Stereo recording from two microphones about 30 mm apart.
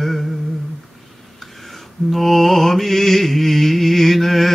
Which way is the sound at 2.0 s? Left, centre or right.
Centre.